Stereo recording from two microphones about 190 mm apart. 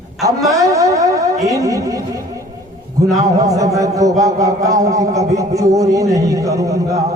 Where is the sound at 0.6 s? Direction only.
15° right (ahead or behind).